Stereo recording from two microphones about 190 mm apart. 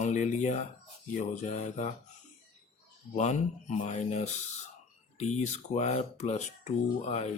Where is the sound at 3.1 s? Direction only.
40° left (ahead or behind).